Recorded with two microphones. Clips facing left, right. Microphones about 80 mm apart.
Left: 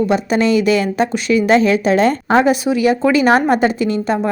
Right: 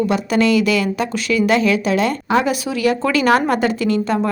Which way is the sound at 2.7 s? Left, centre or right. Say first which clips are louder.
Left 4 dB; left.